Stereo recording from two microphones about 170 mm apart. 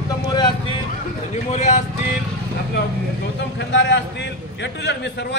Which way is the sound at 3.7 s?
90° left.